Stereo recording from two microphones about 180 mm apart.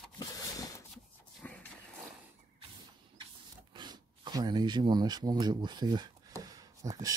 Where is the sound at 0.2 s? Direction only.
20° left (ahead or behind).